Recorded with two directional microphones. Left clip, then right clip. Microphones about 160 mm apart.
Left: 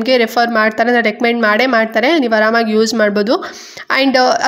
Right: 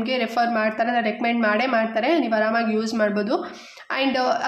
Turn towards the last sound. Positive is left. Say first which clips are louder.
# left 10 dB
turn(degrees=45)  # may be behind; listen again after turning